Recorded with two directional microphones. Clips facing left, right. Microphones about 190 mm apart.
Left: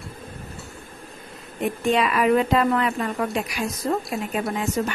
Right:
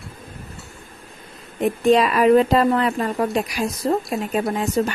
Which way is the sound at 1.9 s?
35° right (ahead or behind).